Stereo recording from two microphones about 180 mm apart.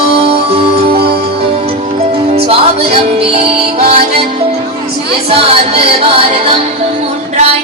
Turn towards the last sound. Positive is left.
turn(degrees=-30)  # may be behind; listen again after turning